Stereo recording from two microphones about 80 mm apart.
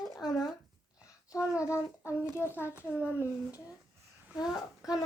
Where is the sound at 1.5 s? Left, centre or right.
Centre.